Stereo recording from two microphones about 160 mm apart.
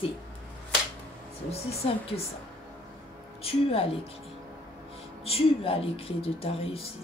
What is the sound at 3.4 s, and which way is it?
Speech, 35° left (ahead or behind).